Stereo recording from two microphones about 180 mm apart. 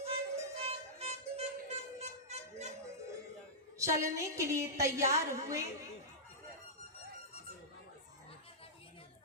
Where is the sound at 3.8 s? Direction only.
15° right (ahead or behind).